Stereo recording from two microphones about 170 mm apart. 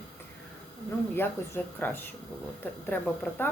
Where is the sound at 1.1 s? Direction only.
10° left (ahead or behind).